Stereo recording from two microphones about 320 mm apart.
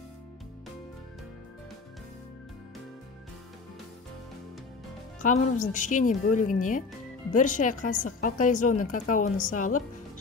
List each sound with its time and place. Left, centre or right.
5.2 s a woman's voice: left